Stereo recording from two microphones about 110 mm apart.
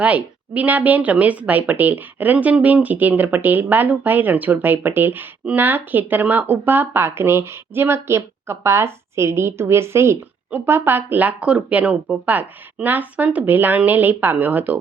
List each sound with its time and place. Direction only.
0.0 s speech: 15° right (ahead or behind)